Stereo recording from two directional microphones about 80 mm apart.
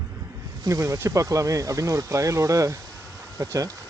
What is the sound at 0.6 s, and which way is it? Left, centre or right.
Speech, right.